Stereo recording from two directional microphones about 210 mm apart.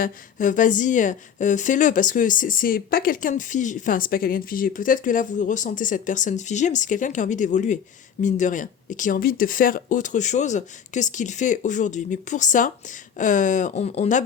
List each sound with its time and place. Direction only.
0.0 s speech: 40° left (ahead or behind)